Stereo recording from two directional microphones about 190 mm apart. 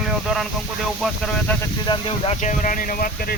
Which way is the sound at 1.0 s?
5° left (ahead or behind).